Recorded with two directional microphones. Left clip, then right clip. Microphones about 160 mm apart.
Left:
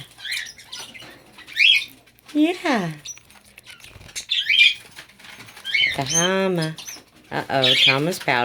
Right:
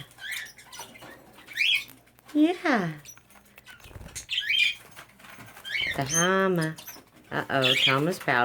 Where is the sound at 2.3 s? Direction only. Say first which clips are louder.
Left 3 dB; 20° left (ahead or behind).